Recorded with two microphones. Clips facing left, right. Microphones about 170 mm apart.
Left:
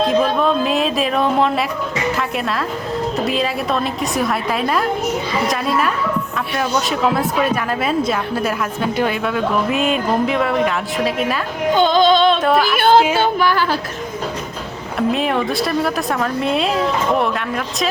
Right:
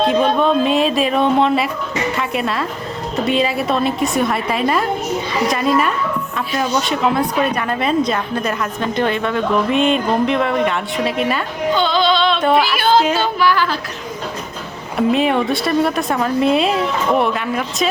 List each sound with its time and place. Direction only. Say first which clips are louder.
0.0 s a woman's voice: right 1 dB; centre (ahead or behind)
11.7 s music: left 3 dB; 45° left (ahead or behind)
12.4 s a woman's voice: right 1 dB; centre (ahead or behind)
12.7 s speech: left 2 dB; 55° left (ahead or behind)
13.1 s music: even; 50° left (ahead or behind)
14.9 s a woman's voice: right 3 dB; centre (ahead or behind)